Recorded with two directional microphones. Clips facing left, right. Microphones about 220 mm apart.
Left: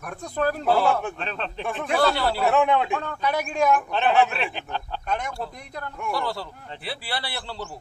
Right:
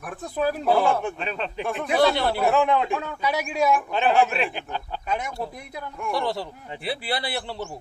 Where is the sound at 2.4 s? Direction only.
Centre (ahead or behind).